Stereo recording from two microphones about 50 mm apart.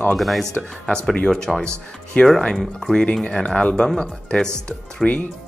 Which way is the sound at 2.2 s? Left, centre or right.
Centre.